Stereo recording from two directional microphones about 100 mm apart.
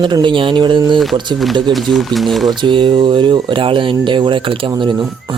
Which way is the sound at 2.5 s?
50° right (ahead or behind).